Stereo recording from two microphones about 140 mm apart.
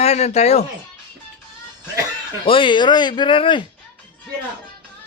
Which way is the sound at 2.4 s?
40° left (ahead or behind).